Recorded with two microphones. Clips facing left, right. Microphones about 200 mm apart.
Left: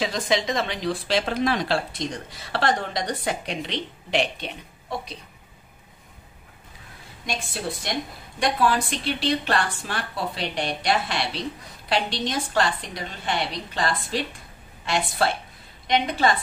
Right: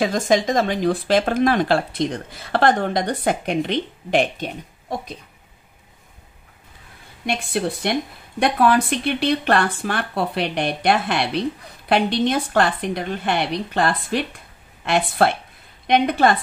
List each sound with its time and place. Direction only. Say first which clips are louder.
0.0 s speech: right 6 dB; 50° right (ahead or behind)
7.2 s speech: right 7 dB; 60° right (ahead or behind)